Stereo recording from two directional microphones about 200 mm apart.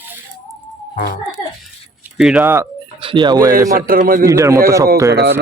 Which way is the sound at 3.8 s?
45° right (ahead or behind).